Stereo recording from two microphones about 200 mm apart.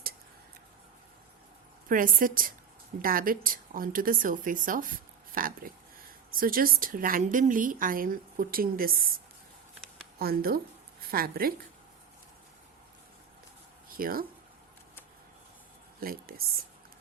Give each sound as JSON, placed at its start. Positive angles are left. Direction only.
{"t": 1.9, "sound": "a woman's voice", "side_deg": -45}
{"t": 13.9, "sound": "speech", "side_deg": -45}
{"t": 16.0, "sound": "speech", "side_deg": -45}